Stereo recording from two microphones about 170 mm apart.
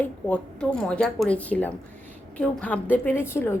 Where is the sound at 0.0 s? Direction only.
10° left (ahead or behind).